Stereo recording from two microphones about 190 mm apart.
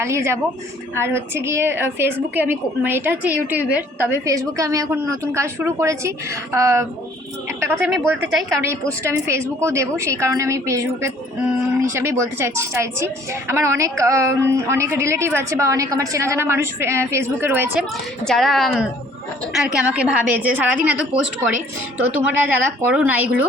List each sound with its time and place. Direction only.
0.0 s a woman's voice: 15° right (ahead or behind)
18.3 s a woman's voice: centre (ahead or behind)